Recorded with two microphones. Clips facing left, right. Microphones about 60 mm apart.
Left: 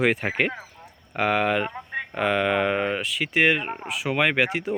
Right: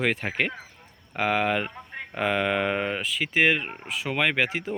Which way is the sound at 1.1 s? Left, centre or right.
Centre.